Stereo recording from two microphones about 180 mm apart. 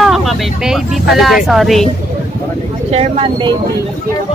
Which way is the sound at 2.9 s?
35° right (ahead or behind).